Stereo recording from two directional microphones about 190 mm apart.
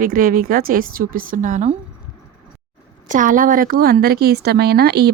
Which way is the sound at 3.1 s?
40° right (ahead or behind).